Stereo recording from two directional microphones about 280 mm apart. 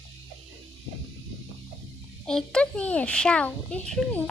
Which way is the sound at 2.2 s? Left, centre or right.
Centre.